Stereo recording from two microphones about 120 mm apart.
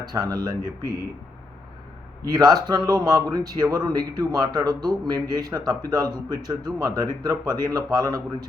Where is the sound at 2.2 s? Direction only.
35° right (ahead or behind).